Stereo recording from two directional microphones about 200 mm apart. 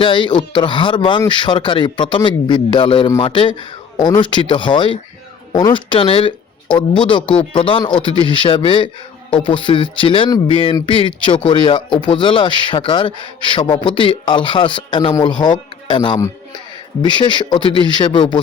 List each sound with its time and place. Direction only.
0.0 s a man's voice: 25° left (ahead or behind)